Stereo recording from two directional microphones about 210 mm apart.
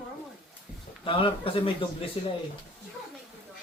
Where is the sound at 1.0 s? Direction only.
25° left (ahead or behind).